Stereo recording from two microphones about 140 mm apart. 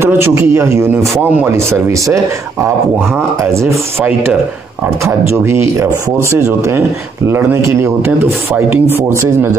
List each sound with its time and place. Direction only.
0.0 s speech: 20° right (ahead or behind)
5.0 s speech: 20° right (ahead or behind)